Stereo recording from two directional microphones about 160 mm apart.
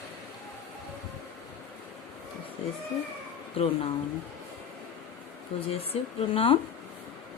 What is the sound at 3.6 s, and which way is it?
Speech, 35° left (ahead or behind).